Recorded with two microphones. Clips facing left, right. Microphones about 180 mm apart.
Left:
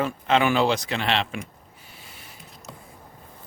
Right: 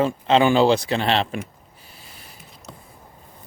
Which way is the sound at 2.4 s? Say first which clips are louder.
Even; centre (ahead or behind).